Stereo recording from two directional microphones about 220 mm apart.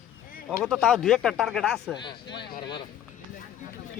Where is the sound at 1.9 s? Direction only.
20° left (ahead or behind).